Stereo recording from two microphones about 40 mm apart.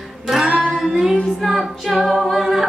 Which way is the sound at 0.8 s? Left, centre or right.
Centre.